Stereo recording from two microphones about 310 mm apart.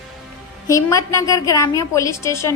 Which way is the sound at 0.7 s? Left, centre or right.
Centre.